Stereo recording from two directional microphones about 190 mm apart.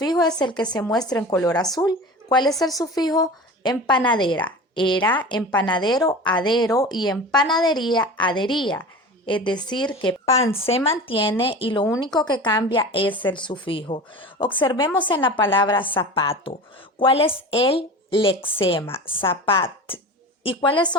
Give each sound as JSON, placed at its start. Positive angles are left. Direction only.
{"t": 0.0, "sound": "a woman's voice", "side_deg": 20}
{"t": 5.0, "sound": "a woman's voice", "side_deg": 10}
{"t": 5.4, "sound": "a woman's voice", "side_deg": 20}